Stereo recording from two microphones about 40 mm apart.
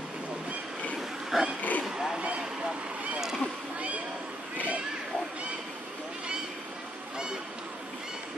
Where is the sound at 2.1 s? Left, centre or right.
Right.